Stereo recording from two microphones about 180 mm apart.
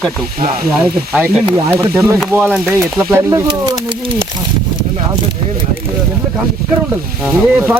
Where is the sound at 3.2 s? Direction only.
20° right (ahead or behind).